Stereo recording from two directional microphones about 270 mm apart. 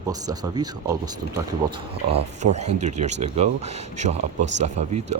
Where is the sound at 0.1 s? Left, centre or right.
Centre.